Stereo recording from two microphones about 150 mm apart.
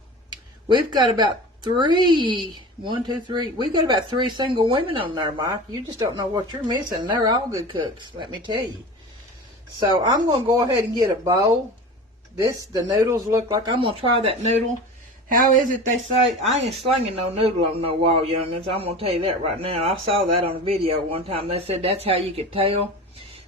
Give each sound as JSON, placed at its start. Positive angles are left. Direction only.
{"t": 0.3, "sound": "a man's voice", "side_deg": -30}
{"t": 9.8, "sound": "speech", "side_deg": -30}
{"t": 12.7, "sound": "a man's voice", "side_deg": -30}
{"t": 15.3, "sound": "speech", "side_deg": -60}
{"t": 16.4, "sound": "a man's voice", "side_deg": -45}